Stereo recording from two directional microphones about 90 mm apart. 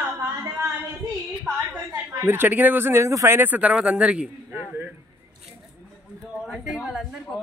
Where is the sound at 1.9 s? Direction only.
25° right (ahead or behind).